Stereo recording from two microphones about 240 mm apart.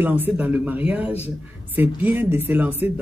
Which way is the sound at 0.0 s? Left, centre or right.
Centre.